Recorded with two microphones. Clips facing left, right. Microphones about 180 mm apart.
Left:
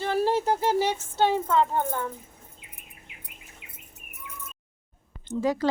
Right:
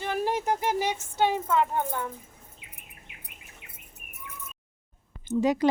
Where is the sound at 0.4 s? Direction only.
30° left (ahead or behind).